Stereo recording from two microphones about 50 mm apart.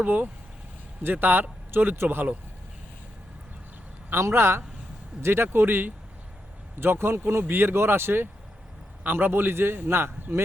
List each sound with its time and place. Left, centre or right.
0.0 s a man's voice: right
4.1 s a man's voice: right